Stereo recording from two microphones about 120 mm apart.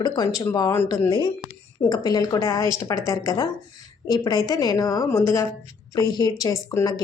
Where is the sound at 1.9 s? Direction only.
35° left (ahead or behind).